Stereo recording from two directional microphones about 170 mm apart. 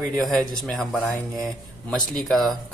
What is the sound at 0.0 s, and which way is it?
Speech, centre (ahead or behind).